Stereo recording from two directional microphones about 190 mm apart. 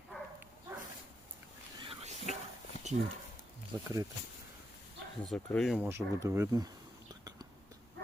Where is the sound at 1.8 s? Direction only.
30° right (ahead or behind).